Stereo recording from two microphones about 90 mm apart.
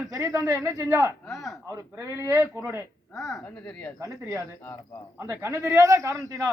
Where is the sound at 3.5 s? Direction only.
15° left (ahead or behind).